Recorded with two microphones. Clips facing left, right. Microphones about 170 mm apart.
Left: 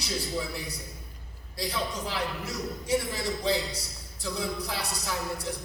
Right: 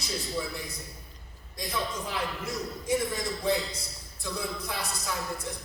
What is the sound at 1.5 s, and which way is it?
A man's voice, 85° left.